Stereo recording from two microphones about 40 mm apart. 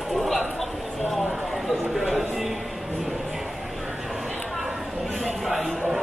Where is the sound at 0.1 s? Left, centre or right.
Centre.